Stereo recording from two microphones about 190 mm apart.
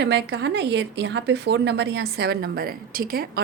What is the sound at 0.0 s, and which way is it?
A woman's voice, 65° right (ahead or behind).